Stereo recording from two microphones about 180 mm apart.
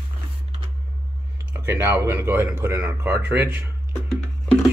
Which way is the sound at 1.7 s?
10° right (ahead or behind).